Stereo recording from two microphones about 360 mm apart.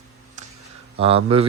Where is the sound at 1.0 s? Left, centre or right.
Centre.